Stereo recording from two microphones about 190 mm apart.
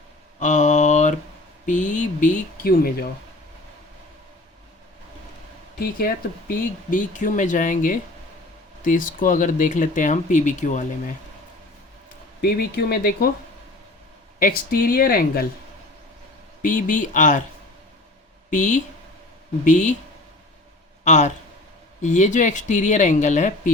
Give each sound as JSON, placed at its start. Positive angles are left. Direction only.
{"t": 0.3, "sound": "mantra", "side_deg": 40}
{"t": 1.6, "sound": "speech", "side_deg": 40}
{"t": 6.5, "sound": "speech", "side_deg": 45}
{"t": 12.4, "sound": "speech", "side_deg": 55}
{"t": 14.3, "sound": "speech", "side_deg": 50}
{"t": 16.6, "sound": "speech", "side_deg": 45}
{"t": 18.5, "sound": "speech", "side_deg": 40}
{"t": 21.0, "sound": "speech", "side_deg": 40}